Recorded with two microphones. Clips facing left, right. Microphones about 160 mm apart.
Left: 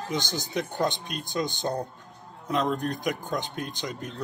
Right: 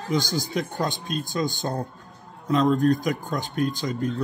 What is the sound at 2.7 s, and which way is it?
Speech, 20° left (ahead or behind).